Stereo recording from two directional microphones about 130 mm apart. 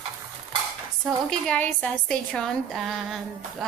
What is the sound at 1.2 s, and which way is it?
A woman's voice, 5° left (ahead or behind).